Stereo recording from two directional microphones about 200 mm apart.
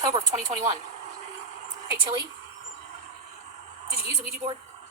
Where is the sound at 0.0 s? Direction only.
20° right (ahead or behind).